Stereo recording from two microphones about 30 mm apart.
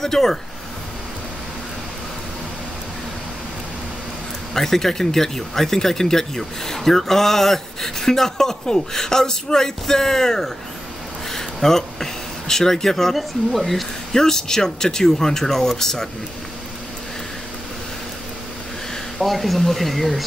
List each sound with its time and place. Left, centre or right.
0.0 s speech: centre
4.6 s speech: centre
11.3 s a sound: centre
13.1 s speech: centre
14.1 s speech: centre
19.1 s speech: centre